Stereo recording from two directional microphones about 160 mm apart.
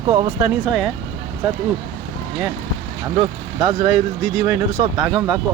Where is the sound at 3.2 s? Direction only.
35° right (ahead or behind).